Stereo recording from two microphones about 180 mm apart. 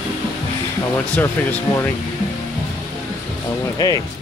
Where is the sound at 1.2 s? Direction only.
10° left (ahead or behind).